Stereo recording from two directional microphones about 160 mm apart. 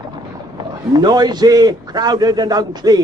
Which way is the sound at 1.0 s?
25° right (ahead or behind).